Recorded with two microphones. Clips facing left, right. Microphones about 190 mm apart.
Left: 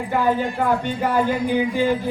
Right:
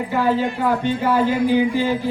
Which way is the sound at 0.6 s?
50° left (ahead or behind).